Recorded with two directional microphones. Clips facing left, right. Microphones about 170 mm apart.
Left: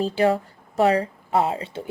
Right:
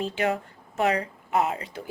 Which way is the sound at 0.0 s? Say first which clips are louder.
Left 6 dB; 35° left (ahead or behind).